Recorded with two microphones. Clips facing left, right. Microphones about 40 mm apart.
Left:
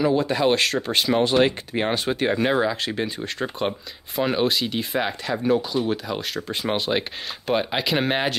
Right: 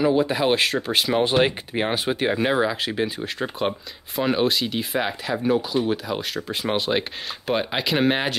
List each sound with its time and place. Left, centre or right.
0.0 s speech: centre
1.2 s speech: centre